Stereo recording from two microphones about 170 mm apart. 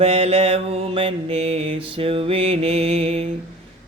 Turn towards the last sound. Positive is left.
turn(degrees=-35)  # may be behind; listen again after turning